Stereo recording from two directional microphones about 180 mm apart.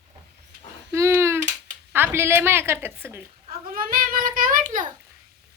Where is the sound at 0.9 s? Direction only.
15° right (ahead or behind).